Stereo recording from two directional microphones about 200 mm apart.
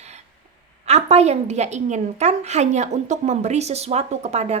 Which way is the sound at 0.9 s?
35° right (ahead or behind).